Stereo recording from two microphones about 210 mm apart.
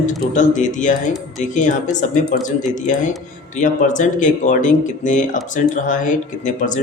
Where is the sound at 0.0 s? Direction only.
35° left (ahead or behind).